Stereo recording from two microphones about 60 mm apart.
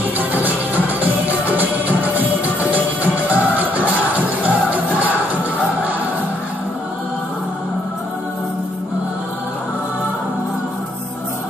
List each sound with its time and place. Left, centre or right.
0.3 s music: right